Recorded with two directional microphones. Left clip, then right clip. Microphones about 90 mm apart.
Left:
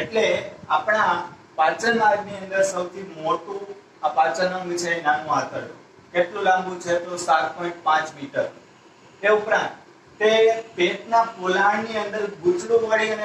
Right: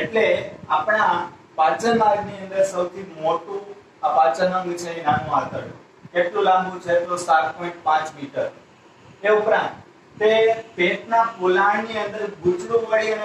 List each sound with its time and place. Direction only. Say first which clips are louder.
0.0 s a man's voice: right 2 dB; 35° right (ahead or behind)